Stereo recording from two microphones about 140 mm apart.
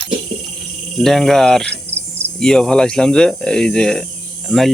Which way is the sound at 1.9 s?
15° right (ahead or behind).